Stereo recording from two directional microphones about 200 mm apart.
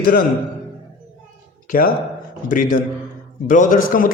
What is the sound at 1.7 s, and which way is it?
A man's voice, 45° left (ahead or behind).